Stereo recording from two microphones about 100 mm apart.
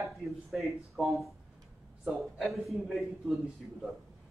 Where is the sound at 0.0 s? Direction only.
Centre (ahead or behind).